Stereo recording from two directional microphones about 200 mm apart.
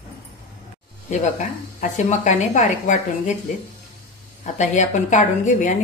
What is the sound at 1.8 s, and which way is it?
A woman's voice, 35° left (ahead or behind).